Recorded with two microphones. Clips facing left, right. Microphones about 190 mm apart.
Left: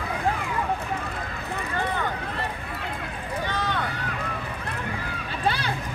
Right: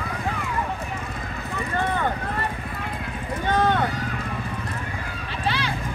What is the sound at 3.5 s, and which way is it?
Vehicle, 50° right (ahead or behind).